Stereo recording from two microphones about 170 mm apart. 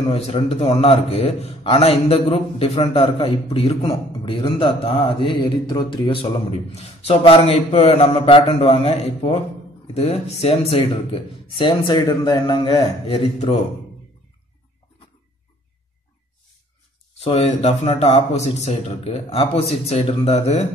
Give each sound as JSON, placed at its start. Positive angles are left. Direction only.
{"t": 0.1, "sound": "a man's voice", "side_deg": 35}
{"t": 17.2, "sound": "a man's voice", "side_deg": 35}